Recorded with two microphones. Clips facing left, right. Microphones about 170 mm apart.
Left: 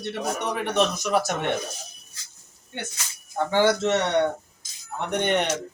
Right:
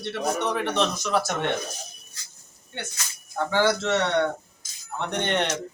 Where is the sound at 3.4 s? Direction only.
15° left (ahead or behind).